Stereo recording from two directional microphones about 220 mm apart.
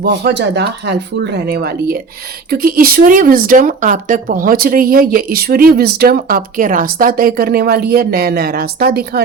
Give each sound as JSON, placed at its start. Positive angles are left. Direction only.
{"t": 0.0, "sound": "speech", "side_deg": -50}